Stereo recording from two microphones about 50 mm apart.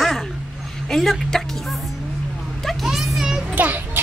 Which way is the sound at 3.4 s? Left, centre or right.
Right.